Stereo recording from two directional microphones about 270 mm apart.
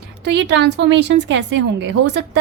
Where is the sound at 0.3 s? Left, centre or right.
Right.